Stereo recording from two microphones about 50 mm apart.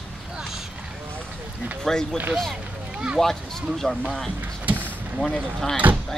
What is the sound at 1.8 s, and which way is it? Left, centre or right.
Speech, centre.